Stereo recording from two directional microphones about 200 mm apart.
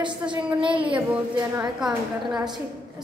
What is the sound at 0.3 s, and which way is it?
Speech, 25° right (ahead or behind).